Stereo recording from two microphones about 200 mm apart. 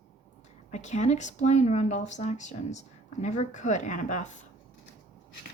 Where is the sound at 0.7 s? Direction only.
35° left (ahead or behind).